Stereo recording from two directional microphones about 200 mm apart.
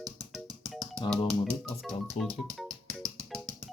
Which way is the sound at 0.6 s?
Centre (ahead or behind).